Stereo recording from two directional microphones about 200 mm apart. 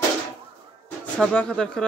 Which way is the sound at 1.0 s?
5° left (ahead or behind).